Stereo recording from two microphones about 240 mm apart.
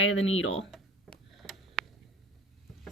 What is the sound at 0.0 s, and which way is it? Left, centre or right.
Speech, left.